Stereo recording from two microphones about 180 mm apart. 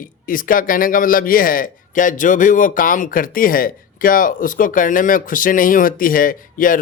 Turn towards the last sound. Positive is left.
turn(degrees=50)  # may be behind; listen again after turning